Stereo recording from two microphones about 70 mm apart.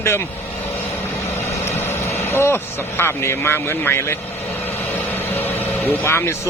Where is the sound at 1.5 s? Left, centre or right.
Left.